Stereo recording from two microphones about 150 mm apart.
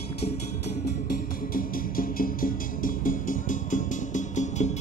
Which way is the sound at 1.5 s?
70° left (ahead or behind).